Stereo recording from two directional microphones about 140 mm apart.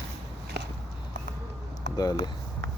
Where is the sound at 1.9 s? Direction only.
25° left (ahead or behind).